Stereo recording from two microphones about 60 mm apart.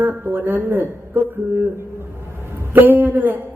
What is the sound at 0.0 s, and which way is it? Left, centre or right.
Speech, right.